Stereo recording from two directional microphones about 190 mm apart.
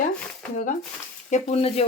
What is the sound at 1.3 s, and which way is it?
Speech, 35° left (ahead or behind).